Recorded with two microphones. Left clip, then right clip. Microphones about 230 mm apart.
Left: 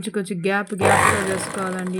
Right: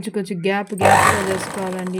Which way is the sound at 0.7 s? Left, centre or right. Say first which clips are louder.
Right 4 dB; right.